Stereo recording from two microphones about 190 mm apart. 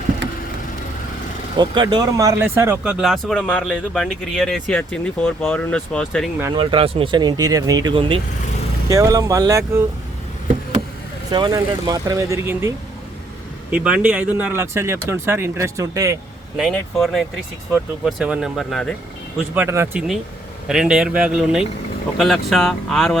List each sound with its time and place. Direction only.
1.5 s speech: 25° right (ahead or behind); by 6.3 s 5° left (ahead or behind)
6.5 s speech: 25° right (ahead or behind)
8.9 s speech: 15° right (ahead or behind)
11.3 s speech: 20° right (ahead or behind)
16.6 s speech: centre (ahead or behind)
19.5 s speech: 15° right (ahead or behind)